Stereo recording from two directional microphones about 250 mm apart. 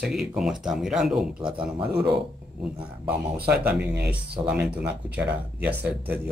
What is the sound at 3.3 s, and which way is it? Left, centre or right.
Speech, right.